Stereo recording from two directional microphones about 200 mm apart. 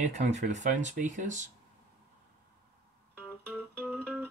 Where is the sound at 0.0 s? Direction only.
35° right (ahead or behind).